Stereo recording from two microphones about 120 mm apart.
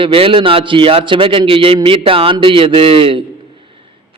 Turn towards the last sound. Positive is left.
turn(degrees=-50)  # may be behind; listen again after turning